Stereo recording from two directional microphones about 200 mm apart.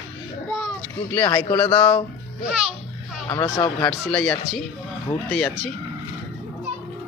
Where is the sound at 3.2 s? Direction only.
20° left (ahead or behind).